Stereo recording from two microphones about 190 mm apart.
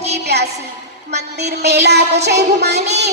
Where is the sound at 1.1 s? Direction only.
60° right (ahead or behind).